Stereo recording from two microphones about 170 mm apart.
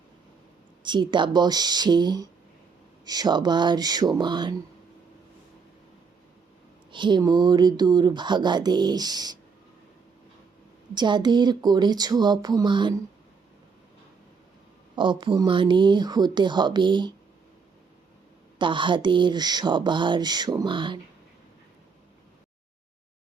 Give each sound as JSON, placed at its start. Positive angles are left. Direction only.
{"t": 0.8, "sound": "speech", "side_deg": -25}
{"t": 6.9, "sound": "speech", "side_deg": -25}
{"t": 10.9, "sound": "speech", "side_deg": -25}
{"t": 14.9, "sound": "speech", "side_deg": -25}
{"t": 18.6, "sound": "speech", "side_deg": -30}